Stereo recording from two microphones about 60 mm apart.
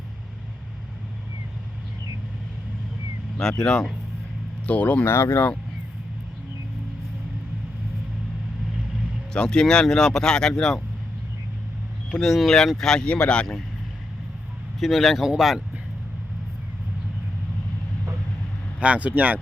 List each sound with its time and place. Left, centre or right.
3.6 s speech: centre
4.6 s speech: left
5.0 s speech: left
9.3 s speech: centre
12.2 s speech: centre
14.8 s speech: centre
18.8 s speech: right